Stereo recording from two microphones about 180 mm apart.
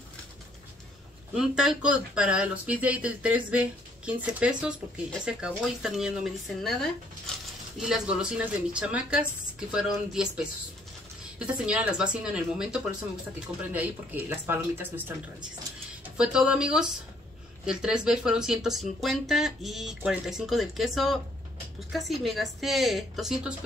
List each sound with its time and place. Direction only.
1.3 s speech: 5° right (ahead or behind)
16.2 s speech: 5° right (ahead or behind)